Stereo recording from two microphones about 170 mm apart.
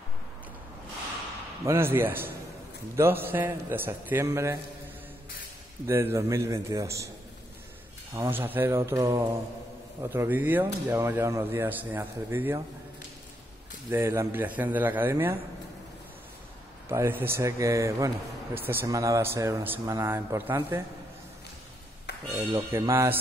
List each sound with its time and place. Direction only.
1.7 s speech: 15° right (ahead or behind)
5.9 s speech: 15° right (ahead or behind)
8.1 s speech: 10° right (ahead or behind)
13.8 s speech: 15° right (ahead or behind)
16.9 s speech: 15° right (ahead or behind)
22.7 s speech: 15° right (ahead or behind)